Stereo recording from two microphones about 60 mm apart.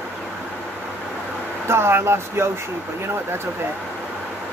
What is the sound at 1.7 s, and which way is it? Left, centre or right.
Speech, right.